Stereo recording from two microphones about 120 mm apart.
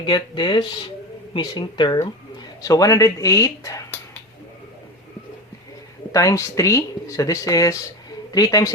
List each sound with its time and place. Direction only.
0.0 s speech: 40° left (ahead or behind)
6.1 s speech: 25° left (ahead or behind)